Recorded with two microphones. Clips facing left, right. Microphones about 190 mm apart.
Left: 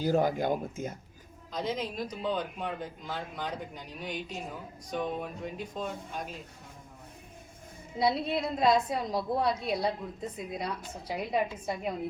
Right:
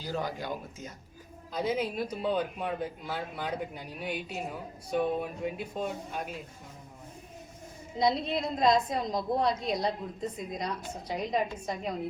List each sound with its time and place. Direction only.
0.0 s speech: 50° left (ahead or behind)
1.5 s speech: 10° right (ahead or behind)
7.9 s a woman's voice: 5° left (ahead or behind)